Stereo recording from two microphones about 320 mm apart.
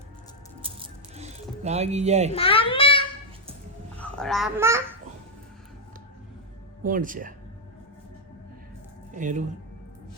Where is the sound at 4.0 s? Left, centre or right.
Centre.